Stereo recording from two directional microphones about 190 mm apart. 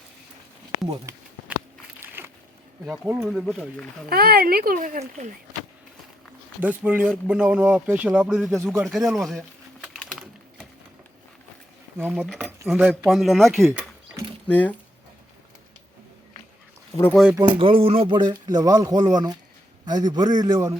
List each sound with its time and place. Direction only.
2.0 s a sound: 10° right (ahead or behind)
2.8 s speech: 5° right (ahead or behind)
4.1 s speech: 55° right (ahead or behind)
6.6 s speech: 10° right (ahead or behind)
9.8 s typing: centre (ahead or behind)
11.9 s speech: 10° right (ahead or behind)
12.2 s speech: centre (ahead or behind)
12.5 s speech: 10° right (ahead or behind)
13.7 s mechanisms: 15° right (ahead or behind)
14.4 s speech: 10° left (ahead or behind)
16.9 s speech: 10° left (ahead or behind)
17.3 s speech: 25° right (ahead or behind)